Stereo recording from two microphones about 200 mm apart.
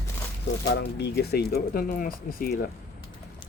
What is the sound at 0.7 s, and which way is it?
Speech, 55° left (ahead or behind).